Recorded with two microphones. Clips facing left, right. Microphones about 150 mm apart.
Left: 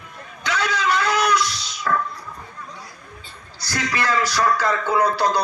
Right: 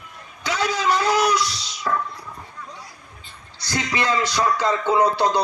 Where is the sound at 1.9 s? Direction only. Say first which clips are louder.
Left 2 dB; 20° right (ahead or behind).